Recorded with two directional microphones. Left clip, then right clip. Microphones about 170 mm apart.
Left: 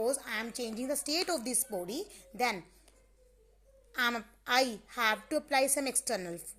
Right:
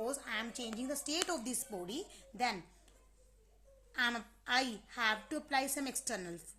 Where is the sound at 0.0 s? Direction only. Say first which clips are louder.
Left 6 dB; 25° left (ahead or behind).